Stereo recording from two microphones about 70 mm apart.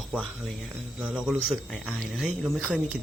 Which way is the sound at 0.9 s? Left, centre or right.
Centre.